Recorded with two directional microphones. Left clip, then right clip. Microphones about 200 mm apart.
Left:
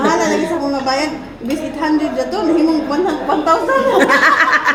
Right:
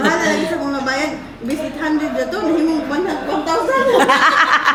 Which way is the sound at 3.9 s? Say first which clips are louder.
Left 1 dB; 20° right (ahead or behind).